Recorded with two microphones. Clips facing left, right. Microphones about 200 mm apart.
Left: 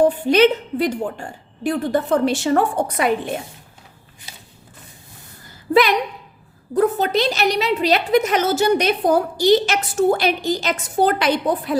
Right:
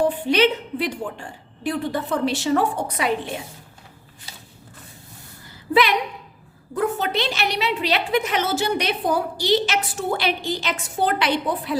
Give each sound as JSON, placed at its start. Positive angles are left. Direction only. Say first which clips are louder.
{"t": 0.0, "sound": "a woman's voice", "louder": "left 5 dB", "side_deg": 45}
{"t": 6.7, "sound": "a woman's voice", "louder": "left 5 dB", "side_deg": 40}